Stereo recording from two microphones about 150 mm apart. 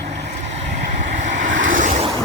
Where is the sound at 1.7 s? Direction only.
55° right (ahead or behind).